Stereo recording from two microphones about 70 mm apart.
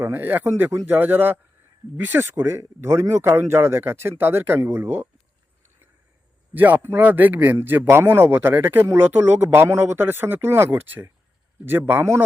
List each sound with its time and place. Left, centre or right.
0.0 s a man's voice: right
6.5 s a man's voice: right